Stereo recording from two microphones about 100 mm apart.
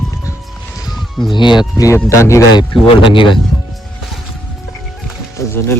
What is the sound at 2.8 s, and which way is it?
Speech, 60° left (ahead or behind).